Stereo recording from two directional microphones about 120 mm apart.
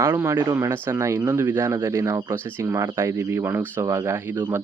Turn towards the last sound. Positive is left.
turn(degrees=-20)  # may be behind; listen again after turning